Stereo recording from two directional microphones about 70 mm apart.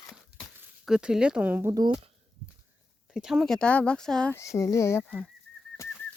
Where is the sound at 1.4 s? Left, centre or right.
Right.